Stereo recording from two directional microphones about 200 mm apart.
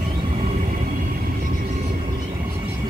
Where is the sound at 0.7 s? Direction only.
45° right (ahead or behind).